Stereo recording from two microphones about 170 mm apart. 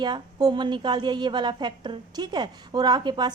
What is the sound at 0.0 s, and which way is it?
A woman's voice, 25° right (ahead or behind).